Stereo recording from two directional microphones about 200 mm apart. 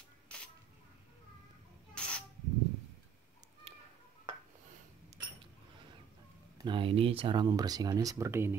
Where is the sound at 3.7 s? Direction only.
30° right (ahead or behind).